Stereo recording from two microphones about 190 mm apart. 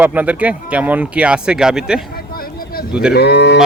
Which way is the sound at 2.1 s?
50° left (ahead or behind).